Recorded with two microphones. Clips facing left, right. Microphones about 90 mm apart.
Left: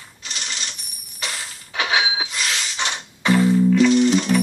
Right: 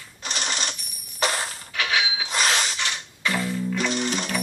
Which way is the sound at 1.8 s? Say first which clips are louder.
Left 4 dB; 25° left (ahead or behind).